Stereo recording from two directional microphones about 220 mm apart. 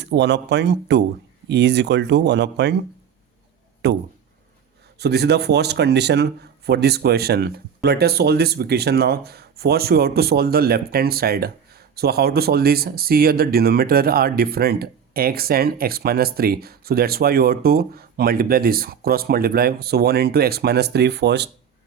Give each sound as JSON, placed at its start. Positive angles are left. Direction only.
{"t": 0.0, "sound": "speech", "side_deg": -50}
{"t": 3.8, "sound": "a sound", "side_deg": -50}
{"t": 4.9, "sound": "speech", "side_deg": -50}